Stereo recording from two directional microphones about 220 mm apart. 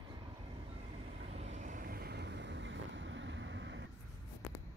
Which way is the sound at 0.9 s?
30° right (ahead or behind).